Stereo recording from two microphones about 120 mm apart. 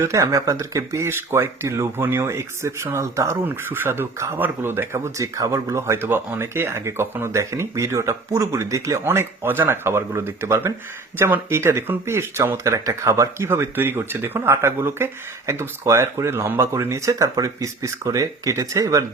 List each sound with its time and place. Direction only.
0.0 s speech: 25° right (ahead or behind)